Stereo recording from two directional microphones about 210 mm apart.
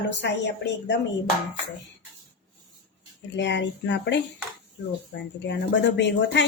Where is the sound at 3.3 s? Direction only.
55° left (ahead or behind).